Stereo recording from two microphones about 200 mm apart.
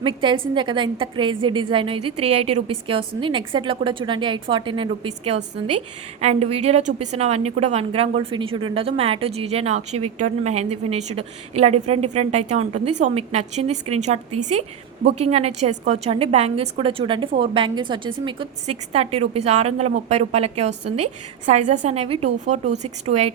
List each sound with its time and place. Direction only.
0.0 s a woman's voice: 25° right (ahead or behind)
6.1 s a woman's voice: 30° right (ahead or behind)